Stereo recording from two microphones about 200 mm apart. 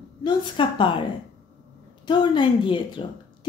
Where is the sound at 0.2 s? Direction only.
20° left (ahead or behind).